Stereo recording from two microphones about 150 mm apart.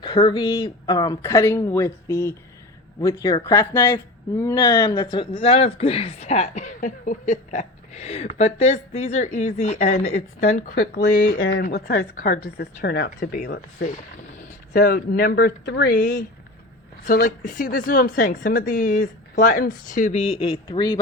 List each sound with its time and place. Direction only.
0.0 s speech: 30° left (ahead or behind); by 11.0 s 65° left (ahead or behind)
11.6 s speech: 90° left; by 13.9 s 65° left (ahead or behind)
14.7 s speech: 80° left
17.1 s a woman's voice: 65° left (ahead or behind)
20.4 s speech: 30° left (ahead or behind)